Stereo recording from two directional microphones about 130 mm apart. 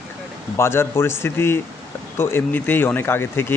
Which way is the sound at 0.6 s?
20° left (ahead or behind).